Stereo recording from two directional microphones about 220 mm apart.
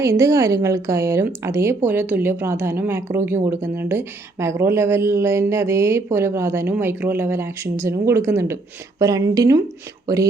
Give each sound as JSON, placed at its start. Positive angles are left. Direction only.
{"t": 0.0, "sound": "speech", "side_deg": -15}